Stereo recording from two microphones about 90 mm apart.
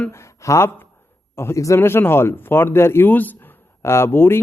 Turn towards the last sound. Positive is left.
turn(degrees=25)  # may be behind; listen again after turning